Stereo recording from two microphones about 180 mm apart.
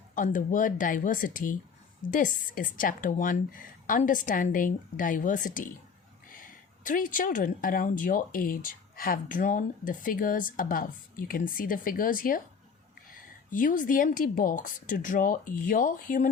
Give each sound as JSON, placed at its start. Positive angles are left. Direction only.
{"t": 0.1, "sound": "speech", "side_deg": 45}
{"t": 13.5, "sound": "speech", "side_deg": 45}